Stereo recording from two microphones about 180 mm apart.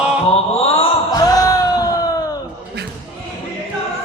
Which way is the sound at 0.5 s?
35° left (ahead or behind).